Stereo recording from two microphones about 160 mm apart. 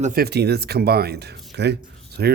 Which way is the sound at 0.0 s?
65° right (ahead or behind).